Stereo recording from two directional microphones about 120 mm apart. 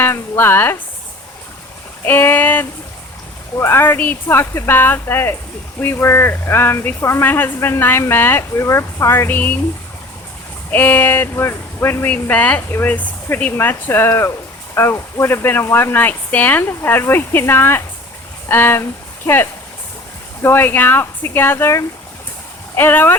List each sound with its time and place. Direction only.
0.0 s speech: 20° left (ahead or behind)
2.0 s speech: 15° left (ahead or behind)
10.7 s speech: 15° left (ahead or behind)